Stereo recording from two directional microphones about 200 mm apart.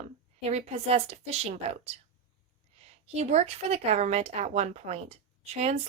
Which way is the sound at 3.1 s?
35° right (ahead or behind).